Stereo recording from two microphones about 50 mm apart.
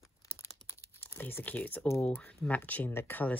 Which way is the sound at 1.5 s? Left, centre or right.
Left.